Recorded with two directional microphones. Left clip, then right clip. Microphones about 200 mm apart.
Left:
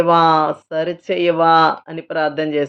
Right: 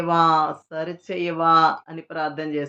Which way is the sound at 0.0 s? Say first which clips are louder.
Left 6 dB; 40° left (ahead or behind).